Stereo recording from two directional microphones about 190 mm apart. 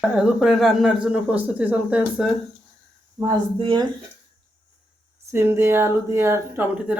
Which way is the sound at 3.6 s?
25° right (ahead or behind).